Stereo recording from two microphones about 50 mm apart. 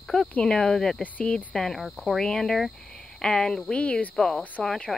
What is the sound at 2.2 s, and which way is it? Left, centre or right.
Speech, centre.